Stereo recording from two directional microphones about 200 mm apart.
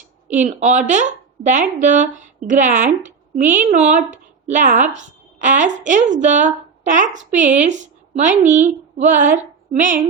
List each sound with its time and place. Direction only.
0.3 s a woman's voice: 35° right (ahead or behind)
9.2 s a sound: 10° right (ahead or behind)
9.8 s a woman's voice: 40° right (ahead or behind)